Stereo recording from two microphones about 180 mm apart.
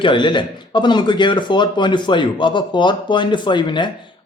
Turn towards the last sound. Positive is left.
turn(degrees=25)  # may be behind; listen again after turning